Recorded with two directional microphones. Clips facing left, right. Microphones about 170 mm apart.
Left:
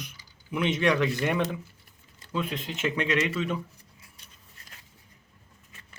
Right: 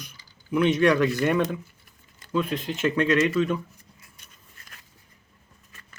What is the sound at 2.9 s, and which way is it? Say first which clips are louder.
Speech: right 7 dB; 20° left (ahead or behind).